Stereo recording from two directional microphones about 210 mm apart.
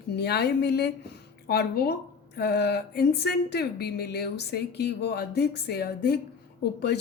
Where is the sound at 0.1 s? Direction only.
50° left (ahead or behind).